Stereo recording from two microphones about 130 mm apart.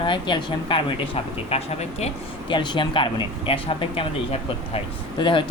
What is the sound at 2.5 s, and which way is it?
Speech, 35° left (ahead or behind).